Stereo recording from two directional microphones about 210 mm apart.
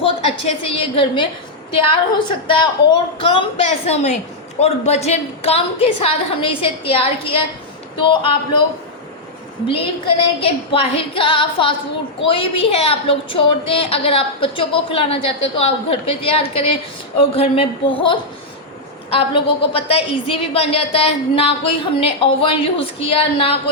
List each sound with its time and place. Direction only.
0.0 s a woman's voice: 30° left (ahead or behind)
10.4 s a woman's voice: 25° left (ahead or behind)